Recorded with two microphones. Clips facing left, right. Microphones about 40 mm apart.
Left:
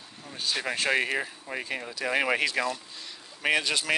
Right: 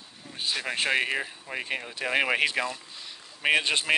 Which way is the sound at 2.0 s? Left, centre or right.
Right.